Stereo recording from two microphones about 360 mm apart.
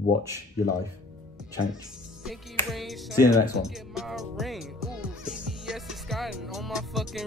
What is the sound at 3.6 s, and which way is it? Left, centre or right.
Music, centre.